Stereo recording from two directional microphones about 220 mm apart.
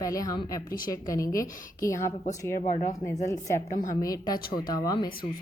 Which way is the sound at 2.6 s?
35° left (ahead or behind).